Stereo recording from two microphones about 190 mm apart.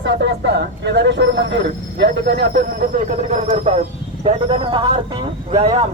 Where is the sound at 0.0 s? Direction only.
65° right (ahead or behind).